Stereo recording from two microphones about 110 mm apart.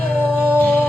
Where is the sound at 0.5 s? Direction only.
15° left (ahead or behind).